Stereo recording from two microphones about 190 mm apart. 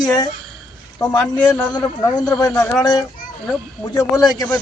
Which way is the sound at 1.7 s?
20° left (ahead or behind).